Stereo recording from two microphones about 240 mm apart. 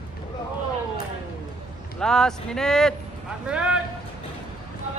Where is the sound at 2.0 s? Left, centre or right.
Centre.